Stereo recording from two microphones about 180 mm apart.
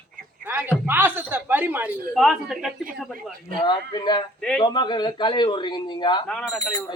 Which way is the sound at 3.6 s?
25° left (ahead or behind).